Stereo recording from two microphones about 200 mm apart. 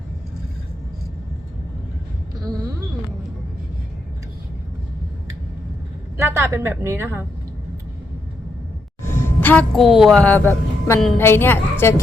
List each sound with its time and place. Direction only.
2.4 s a sound: 20° right (ahead or behind)
6.1 s a woman's voice: 10° right (ahead or behind)
9.0 s a woman's voice: 10° left (ahead or behind)